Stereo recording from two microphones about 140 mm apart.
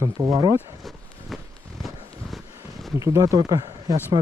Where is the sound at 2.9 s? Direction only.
25° right (ahead or behind).